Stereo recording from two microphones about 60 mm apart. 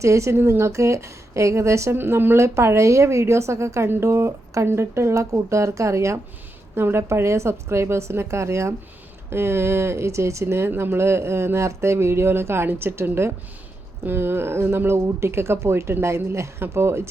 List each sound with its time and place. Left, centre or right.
0.0 s speech: right
2.0 s speech: right
3.8 s speech: right
6.7 s speech: right